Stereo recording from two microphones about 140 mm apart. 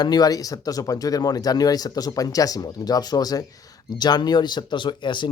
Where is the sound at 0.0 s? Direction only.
30° left (ahead or behind).